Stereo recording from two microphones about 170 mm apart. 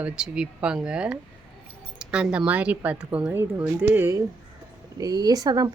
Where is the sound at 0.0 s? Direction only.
5° right (ahead or behind).